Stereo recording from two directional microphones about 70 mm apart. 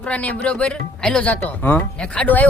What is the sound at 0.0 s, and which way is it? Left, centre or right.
Speech, centre.